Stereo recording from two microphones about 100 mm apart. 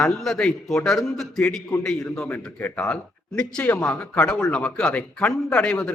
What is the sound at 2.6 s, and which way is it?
Speech, 15° left (ahead or behind).